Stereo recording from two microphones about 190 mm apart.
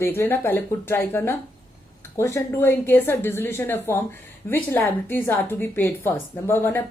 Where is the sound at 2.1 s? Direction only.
15° left (ahead or behind).